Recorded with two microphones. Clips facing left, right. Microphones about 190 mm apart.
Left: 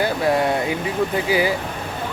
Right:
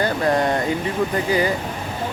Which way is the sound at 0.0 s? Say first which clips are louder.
Even; 5° left (ahead or behind).